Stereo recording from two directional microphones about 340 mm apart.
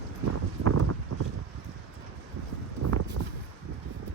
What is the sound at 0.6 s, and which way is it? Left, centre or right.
Clip-clop, right.